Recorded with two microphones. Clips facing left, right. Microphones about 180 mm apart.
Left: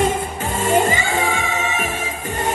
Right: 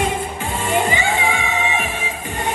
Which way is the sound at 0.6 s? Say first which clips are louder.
Left 2 dB; 45° left (ahead or behind).